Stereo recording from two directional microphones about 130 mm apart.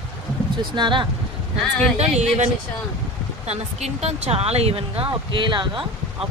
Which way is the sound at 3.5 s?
55° right (ahead or behind).